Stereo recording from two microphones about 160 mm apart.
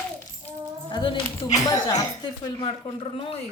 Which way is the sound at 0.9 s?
30° left (ahead or behind).